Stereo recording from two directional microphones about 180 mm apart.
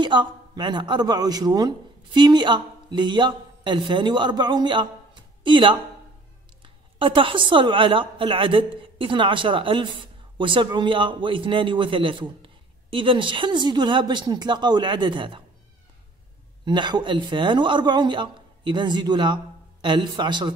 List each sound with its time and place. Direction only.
0.0 s a woman's voice: 25° right (ahead or behind)
16.6 s a woman's voice: 25° right (ahead or behind)